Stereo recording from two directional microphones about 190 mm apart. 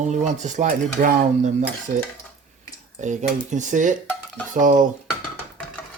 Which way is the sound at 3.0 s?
40° right (ahead or behind).